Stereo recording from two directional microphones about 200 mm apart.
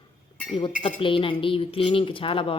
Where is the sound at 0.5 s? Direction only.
25° left (ahead or behind).